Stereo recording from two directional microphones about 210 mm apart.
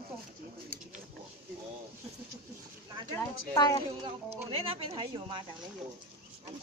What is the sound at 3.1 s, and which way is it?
Speech, 15° left (ahead or behind).